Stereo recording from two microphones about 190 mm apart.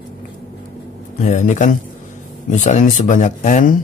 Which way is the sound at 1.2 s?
40° left (ahead or behind).